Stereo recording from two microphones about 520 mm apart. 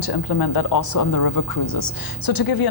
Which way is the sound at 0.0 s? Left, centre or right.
Left.